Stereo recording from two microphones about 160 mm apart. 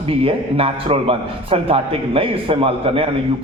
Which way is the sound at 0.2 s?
35° right (ahead or behind).